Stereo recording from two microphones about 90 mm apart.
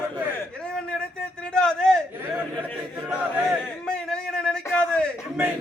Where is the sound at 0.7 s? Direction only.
10° left (ahead or behind).